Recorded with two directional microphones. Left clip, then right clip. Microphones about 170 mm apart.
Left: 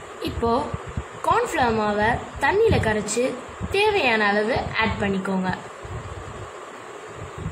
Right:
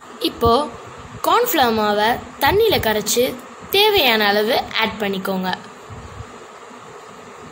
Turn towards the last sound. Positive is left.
turn(degrees=-50)  # may be behind; listen again after turning